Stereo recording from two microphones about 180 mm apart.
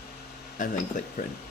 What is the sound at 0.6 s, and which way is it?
Speech, 45° left (ahead or behind).